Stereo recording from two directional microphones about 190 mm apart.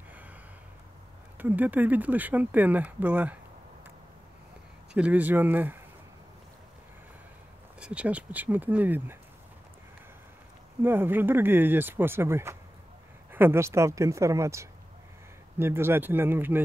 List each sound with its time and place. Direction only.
1.4 s speech: 10° right (ahead or behind)
4.9 s speech: 10° right (ahead or behind)
7.8 s speech: 5° right (ahead or behind)
10.8 s speech: 10° right (ahead or behind)